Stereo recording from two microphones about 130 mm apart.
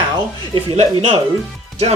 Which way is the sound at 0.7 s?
50° right (ahead or behind).